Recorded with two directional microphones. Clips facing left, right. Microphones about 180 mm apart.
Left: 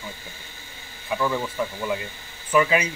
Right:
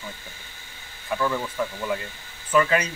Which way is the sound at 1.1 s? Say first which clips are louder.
Left 1 dB; 10° left (ahead or behind).